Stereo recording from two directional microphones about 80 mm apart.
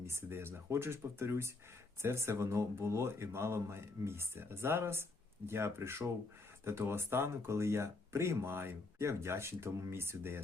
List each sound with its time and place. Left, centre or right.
0.0 s speech: right